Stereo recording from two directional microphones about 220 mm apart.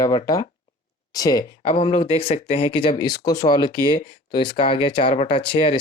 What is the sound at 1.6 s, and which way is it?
Speech, 30° left (ahead or behind).